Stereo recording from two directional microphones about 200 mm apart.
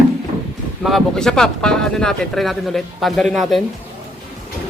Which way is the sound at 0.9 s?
Centre (ahead or behind).